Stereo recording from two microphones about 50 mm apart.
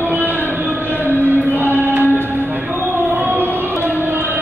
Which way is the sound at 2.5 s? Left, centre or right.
Right.